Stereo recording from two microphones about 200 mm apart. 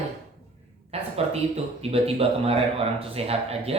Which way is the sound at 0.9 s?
30° right (ahead or behind).